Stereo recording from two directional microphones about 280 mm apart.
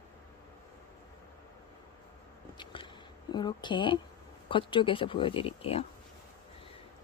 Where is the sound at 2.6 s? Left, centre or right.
Centre.